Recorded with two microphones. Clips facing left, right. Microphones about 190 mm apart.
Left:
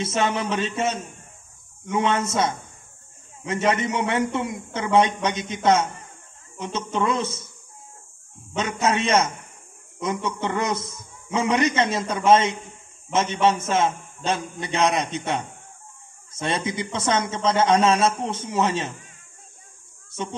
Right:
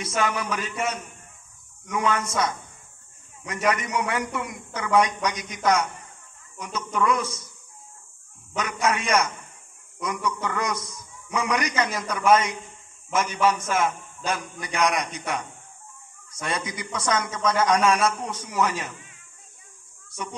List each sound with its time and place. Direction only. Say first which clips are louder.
0.0 s a man's voice: left 3 dB; 25° left (ahead or behind)
8.5 s a man's voice: left 3 dB; 25° left (ahead or behind)
20.1 s a sound: left 4 dB; 25° left (ahead or behind)